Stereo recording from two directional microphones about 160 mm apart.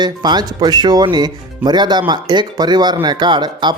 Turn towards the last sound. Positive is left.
turn(degrees=-25)  # may be behind; listen again after turning